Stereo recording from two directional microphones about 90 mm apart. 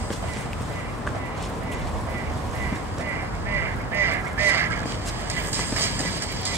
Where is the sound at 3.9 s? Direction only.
25° right (ahead or behind).